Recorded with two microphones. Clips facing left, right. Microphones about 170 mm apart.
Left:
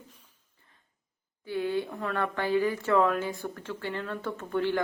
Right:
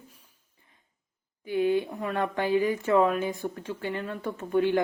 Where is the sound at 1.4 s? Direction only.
15° right (ahead or behind).